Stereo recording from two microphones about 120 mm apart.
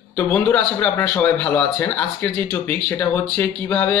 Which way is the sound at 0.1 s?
15° left (ahead or behind).